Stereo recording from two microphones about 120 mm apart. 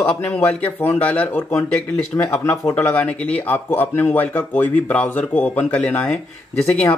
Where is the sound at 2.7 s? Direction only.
15° left (ahead or behind).